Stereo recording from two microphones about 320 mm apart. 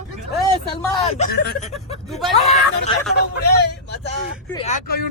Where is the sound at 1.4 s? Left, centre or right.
Left.